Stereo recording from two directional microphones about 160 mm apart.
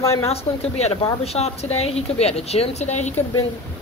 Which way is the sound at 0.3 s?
40° left (ahead or behind).